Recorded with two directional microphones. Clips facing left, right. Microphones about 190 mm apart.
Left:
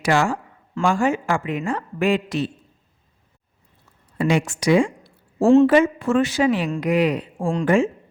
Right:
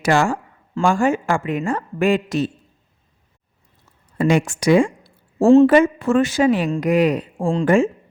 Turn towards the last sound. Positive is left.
turn(degrees=-45)  # may be behind; listen again after turning